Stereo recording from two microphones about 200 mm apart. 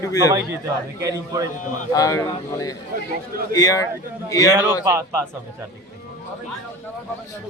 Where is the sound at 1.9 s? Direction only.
15° left (ahead or behind).